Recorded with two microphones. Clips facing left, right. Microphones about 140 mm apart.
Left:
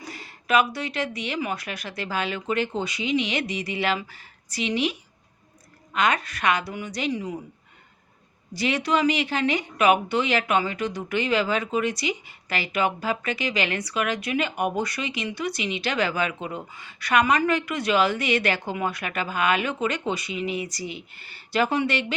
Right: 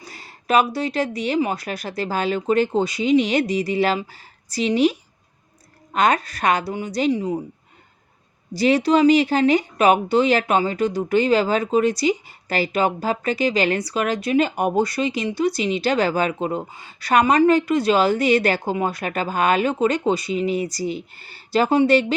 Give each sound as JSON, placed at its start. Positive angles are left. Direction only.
{"t": 0.0, "sound": "speech", "side_deg": -35}
{"t": 8.5, "sound": "speech", "side_deg": -35}